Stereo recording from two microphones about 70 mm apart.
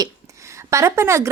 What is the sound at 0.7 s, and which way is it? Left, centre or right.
Speech, right.